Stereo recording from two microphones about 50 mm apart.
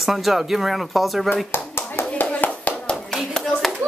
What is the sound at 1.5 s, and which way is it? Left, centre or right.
Speech, left.